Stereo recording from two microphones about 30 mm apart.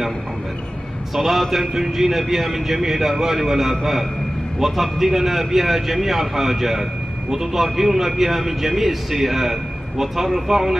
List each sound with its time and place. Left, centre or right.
1.1 s a man's voice: centre